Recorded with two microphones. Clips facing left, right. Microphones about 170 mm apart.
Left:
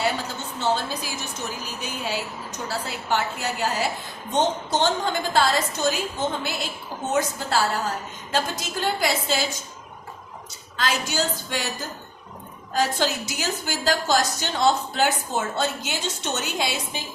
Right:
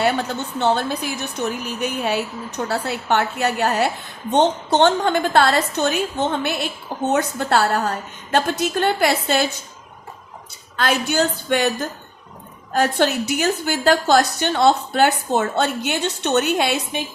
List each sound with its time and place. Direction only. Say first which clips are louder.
0.0 s a woman's voice: right 6 dB; 60° right (ahead or behind)
10.8 s a woman's voice: right 6 dB; 60° right (ahead or behind)